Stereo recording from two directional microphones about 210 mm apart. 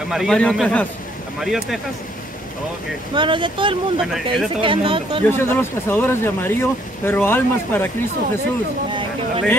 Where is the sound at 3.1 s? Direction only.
25° right (ahead or behind).